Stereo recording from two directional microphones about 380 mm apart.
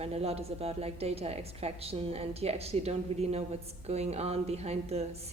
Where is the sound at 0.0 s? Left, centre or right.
Centre.